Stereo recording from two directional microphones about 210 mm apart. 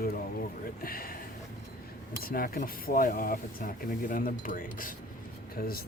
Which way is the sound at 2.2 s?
45° left (ahead or behind).